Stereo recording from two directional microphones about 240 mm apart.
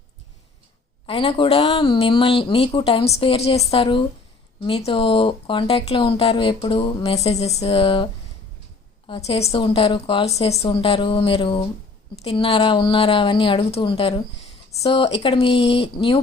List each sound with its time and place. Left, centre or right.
1.0 s speech: left